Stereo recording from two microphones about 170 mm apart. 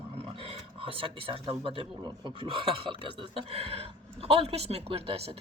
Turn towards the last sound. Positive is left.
turn(degrees=-35)  # may be behind; listen again after turning